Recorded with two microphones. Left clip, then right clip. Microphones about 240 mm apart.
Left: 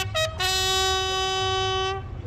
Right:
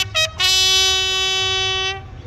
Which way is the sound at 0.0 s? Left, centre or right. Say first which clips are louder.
Right 7 dB; left.